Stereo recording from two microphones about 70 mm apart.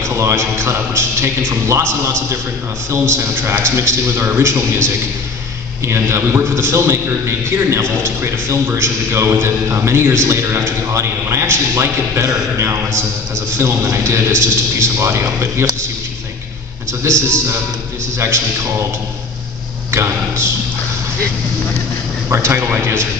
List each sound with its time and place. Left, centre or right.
0.0 s a man's voice: right
17.0 s a man's voice: right
19.9 s a man's voice: right
22.3 s a man's voice: right